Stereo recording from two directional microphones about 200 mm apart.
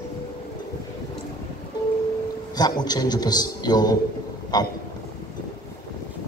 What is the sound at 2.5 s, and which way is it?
A man's voice, 20° left (ahead or behind).